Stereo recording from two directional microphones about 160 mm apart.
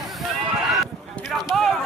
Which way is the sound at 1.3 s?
Centre (ahead or behind).